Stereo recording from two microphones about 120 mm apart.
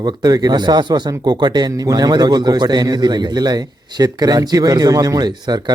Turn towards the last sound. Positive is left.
turn(degrees=-35)  # may be behind; listen again after turning